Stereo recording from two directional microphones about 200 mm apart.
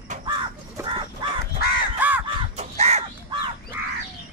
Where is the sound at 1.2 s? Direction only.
25° right (ahead or behind).